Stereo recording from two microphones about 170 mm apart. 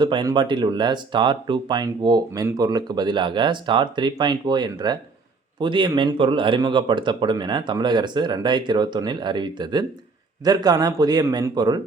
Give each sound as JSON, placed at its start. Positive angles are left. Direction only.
{"t": 0.0, "sound": "speech", "side_deg": -25}